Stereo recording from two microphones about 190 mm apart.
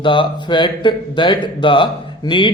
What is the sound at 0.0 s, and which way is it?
Speech, 25° left (ahead or behind).